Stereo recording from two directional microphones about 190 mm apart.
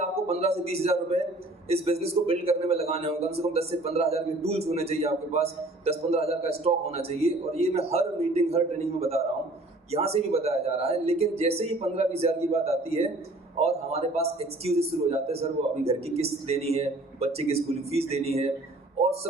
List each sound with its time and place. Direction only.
0.0 s a man's voice: 35° right (ahead or behind)